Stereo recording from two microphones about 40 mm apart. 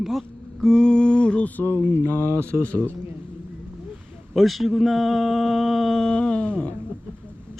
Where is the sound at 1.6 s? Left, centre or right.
Left.